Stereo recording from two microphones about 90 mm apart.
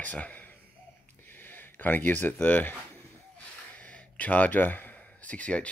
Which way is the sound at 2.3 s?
15° left (ahead or behind).